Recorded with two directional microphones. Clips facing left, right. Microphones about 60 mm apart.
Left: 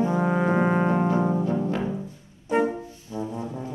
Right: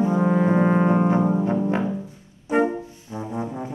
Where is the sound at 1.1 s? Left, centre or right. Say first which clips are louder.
Right 3 dB; right.